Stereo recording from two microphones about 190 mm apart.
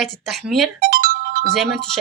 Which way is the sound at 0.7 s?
50° right (ahead or behind).